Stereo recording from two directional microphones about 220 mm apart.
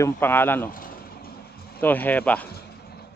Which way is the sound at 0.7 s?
40° left (ahead or behind).